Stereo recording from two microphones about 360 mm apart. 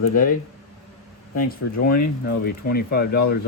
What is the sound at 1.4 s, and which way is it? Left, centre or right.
Speech, left.